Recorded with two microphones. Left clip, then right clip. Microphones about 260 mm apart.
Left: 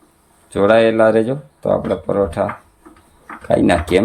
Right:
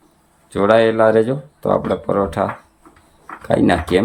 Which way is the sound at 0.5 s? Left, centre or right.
Centre.